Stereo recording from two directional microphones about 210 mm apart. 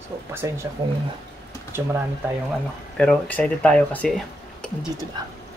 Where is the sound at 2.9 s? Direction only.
5° left (ahead or behind).